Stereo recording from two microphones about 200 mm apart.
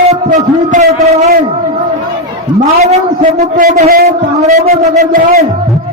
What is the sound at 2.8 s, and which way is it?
A man's voice, 35° right (ahead or behind).